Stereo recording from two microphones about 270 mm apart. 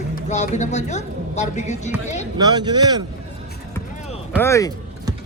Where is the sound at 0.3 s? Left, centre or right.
Left.